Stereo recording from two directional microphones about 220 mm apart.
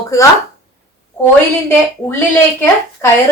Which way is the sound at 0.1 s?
15° left (ahead or behind).